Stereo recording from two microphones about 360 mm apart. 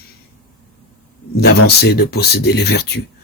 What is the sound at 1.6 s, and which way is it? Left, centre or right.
Speech, left.